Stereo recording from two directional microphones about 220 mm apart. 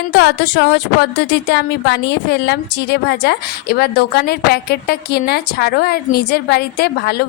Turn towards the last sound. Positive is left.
turn(degrees=45)  # may be behind; listen again after turning